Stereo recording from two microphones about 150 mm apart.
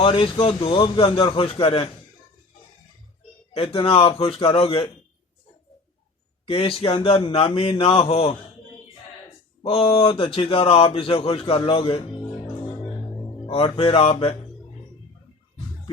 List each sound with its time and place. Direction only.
0.0 s speech: 35° left (ahead or behind)
3.5 s speech: 40° left (ahead or behind)
6.4 s speech: 35° left (ahead or behind)
9.6 s speech: 40° left (ahead or behind)
13.5 s speech: 40° left (ahead or behind)